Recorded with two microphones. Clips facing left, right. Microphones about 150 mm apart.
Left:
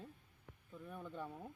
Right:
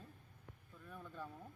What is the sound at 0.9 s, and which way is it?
Speech, 20° left (ahead or behind).